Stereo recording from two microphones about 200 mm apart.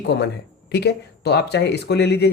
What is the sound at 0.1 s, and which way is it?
Speech, 55° left (ahead or behind).